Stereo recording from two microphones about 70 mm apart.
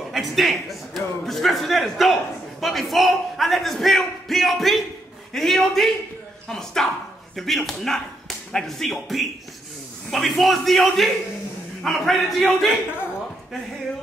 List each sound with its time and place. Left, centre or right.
0.1 s a man's voice: centre
12.4 s speech: left